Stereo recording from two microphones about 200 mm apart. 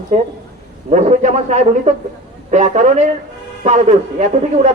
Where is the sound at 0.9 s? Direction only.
35° right (ahead or behind).